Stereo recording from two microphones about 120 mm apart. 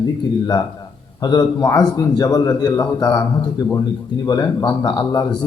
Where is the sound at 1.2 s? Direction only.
35° left (ahead or behind).